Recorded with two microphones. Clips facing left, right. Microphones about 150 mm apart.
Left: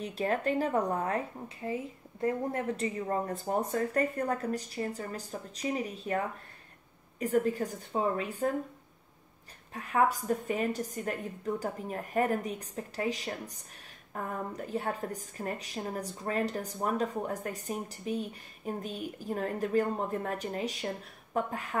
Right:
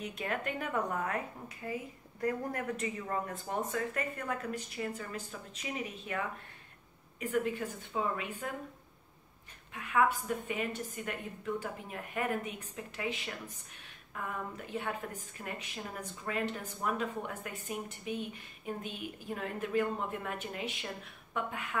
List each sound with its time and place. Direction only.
0.0 s a woman's voice: 35° left (ahead or behind)
9.8 s a woman's voice: 40° left (ahead or behind)